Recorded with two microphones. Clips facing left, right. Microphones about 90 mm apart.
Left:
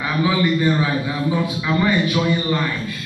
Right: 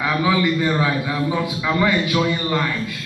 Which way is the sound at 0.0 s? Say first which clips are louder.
Right 1 dB; 75° right (ahead or behind).